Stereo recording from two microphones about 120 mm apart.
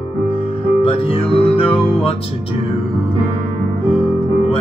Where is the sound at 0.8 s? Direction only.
55° left (ahead or behind).